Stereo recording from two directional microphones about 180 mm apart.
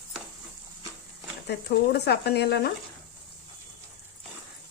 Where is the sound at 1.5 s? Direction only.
65° left (ahead or behind).